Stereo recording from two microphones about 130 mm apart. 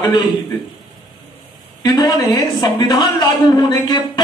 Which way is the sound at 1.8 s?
30° left (ahead or behind).